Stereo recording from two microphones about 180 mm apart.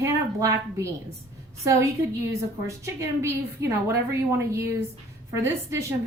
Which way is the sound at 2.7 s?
15° right (ahead or behind).